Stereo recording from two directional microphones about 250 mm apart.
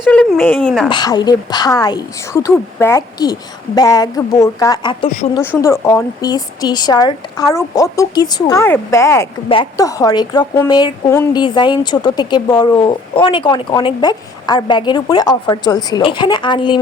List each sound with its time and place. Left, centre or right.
0.0 s speech: centre
0.9 s speech: centre